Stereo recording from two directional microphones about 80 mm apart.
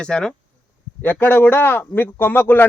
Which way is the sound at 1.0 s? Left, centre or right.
Left.